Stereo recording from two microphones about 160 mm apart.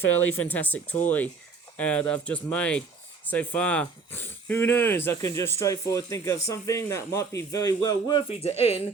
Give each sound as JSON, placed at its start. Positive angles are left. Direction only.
{"t": 0.3, "sound": "speech", "side_deg": 10}
{"t": 8.3, "sound": "speech", "side_deg": 40}